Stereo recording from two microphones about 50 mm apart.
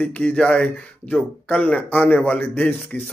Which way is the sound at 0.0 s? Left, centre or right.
Left.